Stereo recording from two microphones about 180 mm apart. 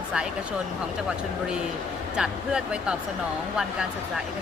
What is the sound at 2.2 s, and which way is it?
Speech, 5° right (ahead or behind).